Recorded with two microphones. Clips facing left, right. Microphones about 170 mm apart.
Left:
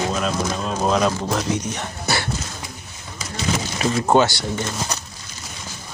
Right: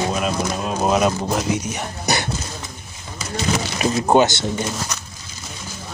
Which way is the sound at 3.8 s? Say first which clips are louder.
Right 1 dB; 15° right (ahead or behind).